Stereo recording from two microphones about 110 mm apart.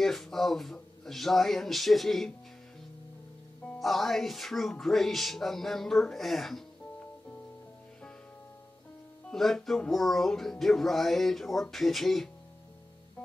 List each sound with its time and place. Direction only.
0.0 s music: centre (ahead or behind)
3.6 s music: centre (ahead or behind)
9.3 s music: centre (ahead or behind)